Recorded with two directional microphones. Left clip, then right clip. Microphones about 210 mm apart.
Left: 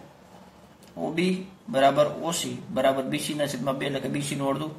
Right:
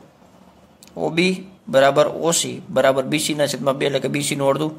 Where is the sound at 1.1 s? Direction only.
50° right (ahead or behind).